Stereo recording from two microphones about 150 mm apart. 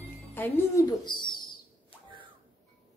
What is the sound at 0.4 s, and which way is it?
Speech, 25° left (ahead or behind).